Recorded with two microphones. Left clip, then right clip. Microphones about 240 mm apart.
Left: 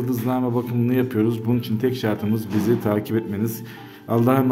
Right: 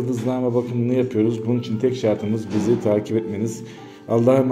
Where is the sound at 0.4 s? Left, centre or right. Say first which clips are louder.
Right 2 dB; left.